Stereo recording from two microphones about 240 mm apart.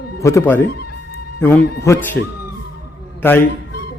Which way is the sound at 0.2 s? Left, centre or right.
Centre.